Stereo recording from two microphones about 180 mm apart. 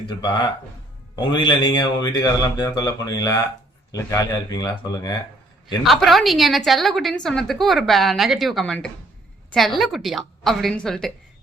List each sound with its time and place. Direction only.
0.2 s a man's voice: 25° left (ahead or behind)
5.8 s a woman's voice: centre (ahead or behind)